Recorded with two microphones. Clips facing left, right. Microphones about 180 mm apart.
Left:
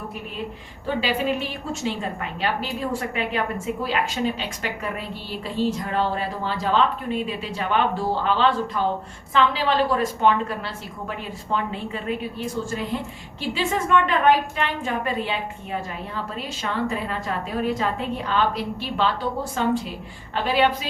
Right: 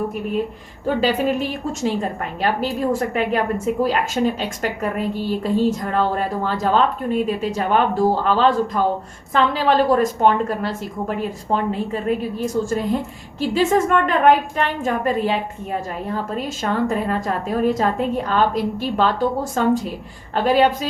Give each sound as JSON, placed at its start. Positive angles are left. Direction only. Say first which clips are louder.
{"t": 1.0, "sound": "a woman's voice", "louder": "right 5 dB", "side_deg": -45}